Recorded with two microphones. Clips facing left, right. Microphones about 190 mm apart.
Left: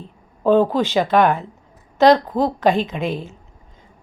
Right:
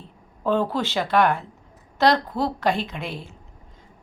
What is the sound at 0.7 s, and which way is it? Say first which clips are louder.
A woman's voice: left 6 dB; 15° left (ahead or behind).